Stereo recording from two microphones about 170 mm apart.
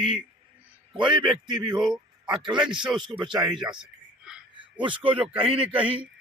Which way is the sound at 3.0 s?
30° right (ahead or behind).